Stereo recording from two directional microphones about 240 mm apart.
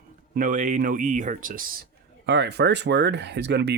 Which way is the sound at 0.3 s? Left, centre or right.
Right.